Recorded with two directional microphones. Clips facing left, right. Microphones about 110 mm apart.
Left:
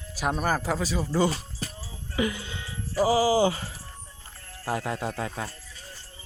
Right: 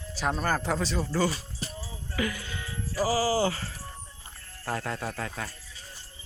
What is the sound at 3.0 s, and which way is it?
Speech, 20° left (ahead or behind).